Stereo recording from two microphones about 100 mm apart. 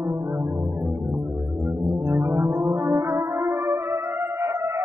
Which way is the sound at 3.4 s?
30° right (ahead or behind).